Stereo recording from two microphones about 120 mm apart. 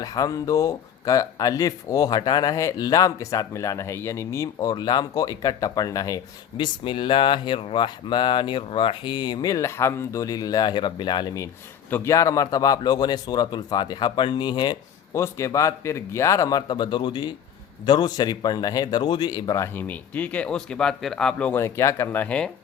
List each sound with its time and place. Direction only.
0.0 s speech: 30° left (ahead or behind)
4.7 s speech: 40° left (ahead or behind)
6.8 s speech: 45° left (ahead or behind)
11.9 s speech: 20° left (ahead or behind); by 14.8 s 40° left (ahead or behind)
15.1 s speech: 25° left (ahead or behind)
21.6 s speech: 25° left (ahead or behind)